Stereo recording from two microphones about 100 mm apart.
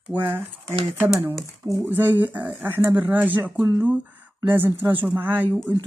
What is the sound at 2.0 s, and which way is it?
Speech, 20° right (ahead or behind).